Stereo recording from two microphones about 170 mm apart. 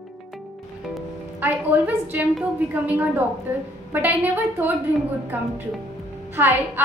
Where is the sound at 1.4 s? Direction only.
10° right (ahead or behind).